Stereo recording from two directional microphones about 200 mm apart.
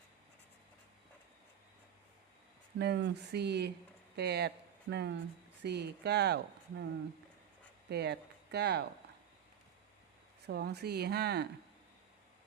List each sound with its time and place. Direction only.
2.7 s speech: 55° right (ahead or behind)
7.9 s speech: 55° right (ahead or behind)
10.4 s speech: 55° right (ahead or behind)